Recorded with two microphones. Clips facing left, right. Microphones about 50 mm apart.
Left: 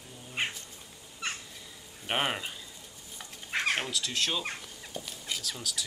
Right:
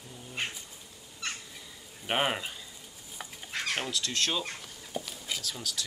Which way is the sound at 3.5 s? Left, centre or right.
Centre.